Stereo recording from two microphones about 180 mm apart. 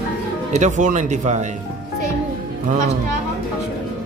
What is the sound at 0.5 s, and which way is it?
Speech, 40° right (ahead or behind).